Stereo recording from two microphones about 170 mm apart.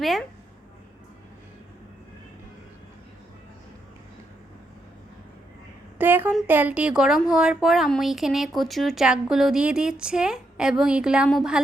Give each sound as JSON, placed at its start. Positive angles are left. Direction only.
{"t": 0.0, "sound": "a woman's voice", "side_deg": 0}
{"t": 6.0, "sound": "a woman's voice", "side_deg": -10}